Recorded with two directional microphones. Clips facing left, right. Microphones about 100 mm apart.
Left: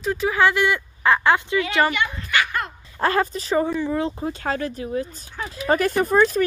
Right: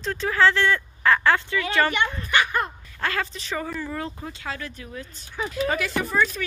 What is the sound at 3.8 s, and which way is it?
Speech, 20° left (ahead or behind).